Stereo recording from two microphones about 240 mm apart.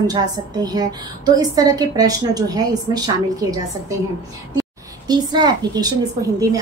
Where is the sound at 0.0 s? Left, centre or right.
Centre.